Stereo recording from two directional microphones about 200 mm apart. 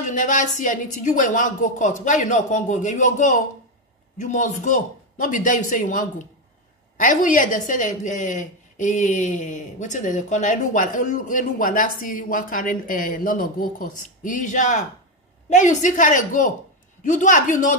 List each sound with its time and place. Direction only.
0.0 s a woman's voice: 40° left (ahead or behind)